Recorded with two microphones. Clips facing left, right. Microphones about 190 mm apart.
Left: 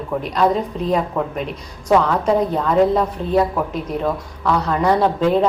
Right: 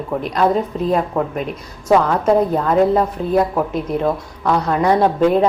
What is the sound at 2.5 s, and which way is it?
A woman's voice, 10° right (ahead or behind).